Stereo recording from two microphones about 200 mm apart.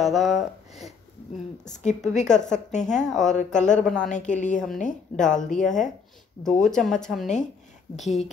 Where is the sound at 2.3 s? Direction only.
35° left (ahead or behind).